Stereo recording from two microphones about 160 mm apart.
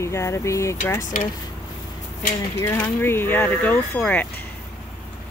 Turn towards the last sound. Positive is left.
turn(degrees=10)  # may be behind; listen again after turning